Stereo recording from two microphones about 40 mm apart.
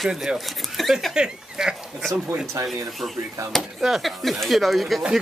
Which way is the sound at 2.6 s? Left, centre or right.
Centre.